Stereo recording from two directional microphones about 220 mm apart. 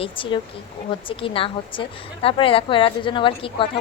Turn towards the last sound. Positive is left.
turn(degrees=25)  # may be behind; listen again after turning